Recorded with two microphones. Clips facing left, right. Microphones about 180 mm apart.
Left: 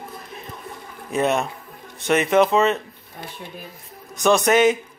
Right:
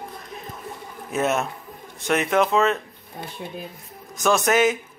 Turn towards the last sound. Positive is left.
turn(degrees=0)  # may be behind; listen again after turning